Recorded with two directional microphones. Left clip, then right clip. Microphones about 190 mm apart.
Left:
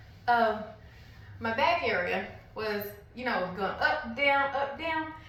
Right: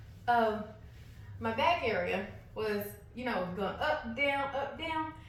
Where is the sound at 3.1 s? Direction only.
20° right (ahead or behind).